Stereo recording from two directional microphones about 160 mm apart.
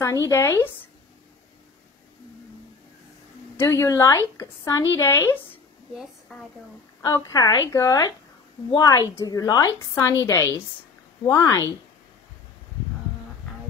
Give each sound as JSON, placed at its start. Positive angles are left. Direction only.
{"t": 0.0, "sound": "a woman's voice", "side_deg": 20}
{"t": 3.5, "sound": "a woman's voice", "side_deg": 20}
{"t": 7.0, "sound": "a woman's voice", "side_deg": 20}